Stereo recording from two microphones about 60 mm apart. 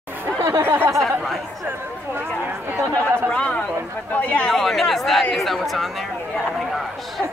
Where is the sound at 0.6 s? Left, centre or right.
Right.